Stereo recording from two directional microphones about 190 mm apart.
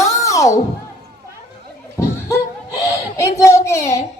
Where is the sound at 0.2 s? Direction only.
15° left (ahead or behind).